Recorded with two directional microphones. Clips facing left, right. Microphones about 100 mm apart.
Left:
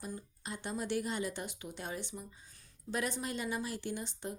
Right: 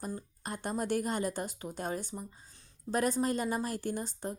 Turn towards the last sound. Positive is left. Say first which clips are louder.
# right 4 dB
turn(degrees=-40)  # may be behind; listen again after turning